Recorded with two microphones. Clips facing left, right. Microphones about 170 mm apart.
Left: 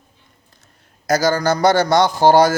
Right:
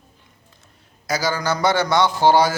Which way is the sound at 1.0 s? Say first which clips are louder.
Left 6 dB; 45° left (ahead or behind).